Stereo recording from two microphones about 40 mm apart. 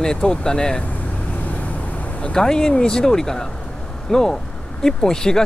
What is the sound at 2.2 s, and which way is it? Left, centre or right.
Speech, centre.